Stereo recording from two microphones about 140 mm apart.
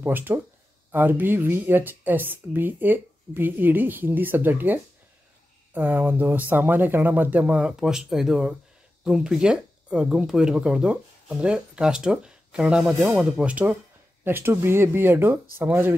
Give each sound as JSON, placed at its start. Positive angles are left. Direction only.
{"t": 0.0, "sound": "speech", "side_deg": -15}
{"t": 5.8, "sound": "speech", "side_deg": -15}